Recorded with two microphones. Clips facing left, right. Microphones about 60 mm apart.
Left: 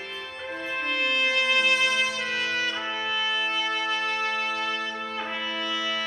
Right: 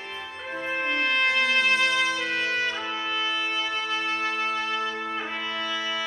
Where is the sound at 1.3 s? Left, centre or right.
Right.